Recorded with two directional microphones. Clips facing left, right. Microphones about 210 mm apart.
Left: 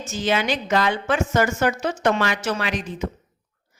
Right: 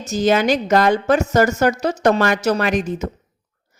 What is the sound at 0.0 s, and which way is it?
A woman's voice, 40° right (ahead or behind).